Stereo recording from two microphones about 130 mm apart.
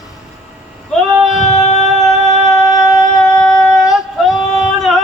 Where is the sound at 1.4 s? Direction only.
55° left (ahead or behind).